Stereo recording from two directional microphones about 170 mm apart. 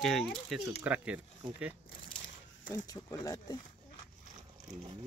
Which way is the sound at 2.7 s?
20° left (ahead or behind).